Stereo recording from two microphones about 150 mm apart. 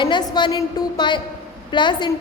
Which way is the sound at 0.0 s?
30° left (ahead or behind).